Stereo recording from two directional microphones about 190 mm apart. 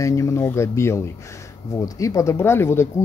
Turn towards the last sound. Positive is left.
turn(degrees=15)  # may be behind; listen again after turning